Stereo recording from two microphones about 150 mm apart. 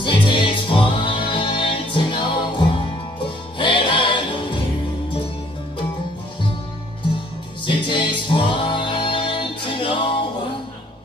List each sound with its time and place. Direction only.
0.0 s music: 35° left (ahead or behind)
7.6 s music: 35° left (ahead or behind)